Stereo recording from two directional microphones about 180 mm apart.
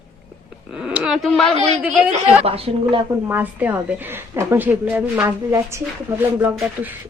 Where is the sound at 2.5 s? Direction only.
30° right (ahead or behind).